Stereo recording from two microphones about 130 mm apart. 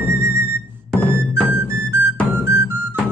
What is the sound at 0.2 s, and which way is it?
Music, 20° right (ahead or behind).